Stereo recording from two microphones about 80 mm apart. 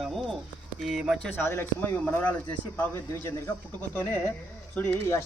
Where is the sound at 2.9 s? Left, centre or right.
Left.